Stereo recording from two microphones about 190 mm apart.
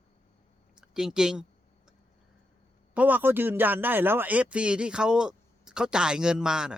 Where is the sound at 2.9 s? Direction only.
10° right (ahead or behind).